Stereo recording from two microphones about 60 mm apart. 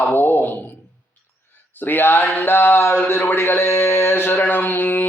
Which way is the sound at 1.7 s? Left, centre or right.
Left.